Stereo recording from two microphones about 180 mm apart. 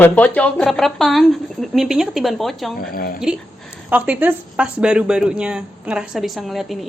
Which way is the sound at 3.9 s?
10° right (ahead or behind).